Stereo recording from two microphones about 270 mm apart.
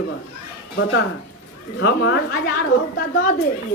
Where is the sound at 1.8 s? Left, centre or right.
Left.